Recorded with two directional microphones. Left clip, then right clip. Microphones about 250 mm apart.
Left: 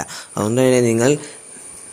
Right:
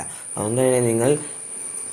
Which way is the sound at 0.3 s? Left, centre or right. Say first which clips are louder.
Left 4 dB; left.